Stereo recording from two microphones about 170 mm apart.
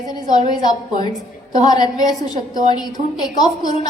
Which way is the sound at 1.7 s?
25° left (ahead or behind).